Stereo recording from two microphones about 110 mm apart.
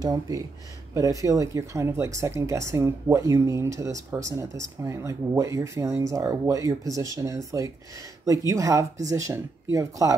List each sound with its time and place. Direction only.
0.0 s speech: 35° right (ahead or behind)